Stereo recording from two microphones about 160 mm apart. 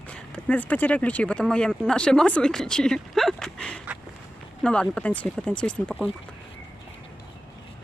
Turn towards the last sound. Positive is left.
turn(degrees=5)  # may be behind; listen again after turning